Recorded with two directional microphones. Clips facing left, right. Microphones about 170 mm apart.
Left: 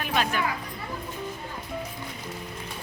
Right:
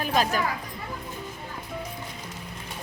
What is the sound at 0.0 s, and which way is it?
Speech, 35° right (ahead or behind).